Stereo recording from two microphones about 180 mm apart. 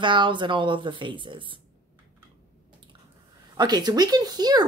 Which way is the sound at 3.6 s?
20° right (ahead or behind).